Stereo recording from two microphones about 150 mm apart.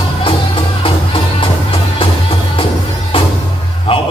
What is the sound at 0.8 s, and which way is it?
Music, 35° left (ahead or behind).